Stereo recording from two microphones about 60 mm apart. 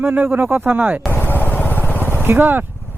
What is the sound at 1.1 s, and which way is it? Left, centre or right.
Vehicle, left.